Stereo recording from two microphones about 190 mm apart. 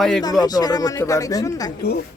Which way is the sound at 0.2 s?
20° left (ahead or behind).